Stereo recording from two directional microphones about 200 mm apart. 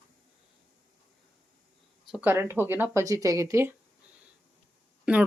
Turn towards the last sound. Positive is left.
turn(degrees=-5)  # may be behind; listen again after turning